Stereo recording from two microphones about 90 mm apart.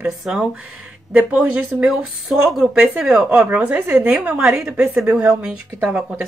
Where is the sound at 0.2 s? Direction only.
5° right (ahead or behind).